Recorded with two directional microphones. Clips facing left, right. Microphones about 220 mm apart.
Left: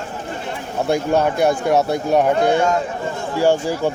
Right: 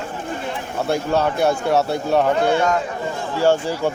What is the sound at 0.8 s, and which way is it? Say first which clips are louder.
Speech: left 2 dB; 15° left (ahead or behind).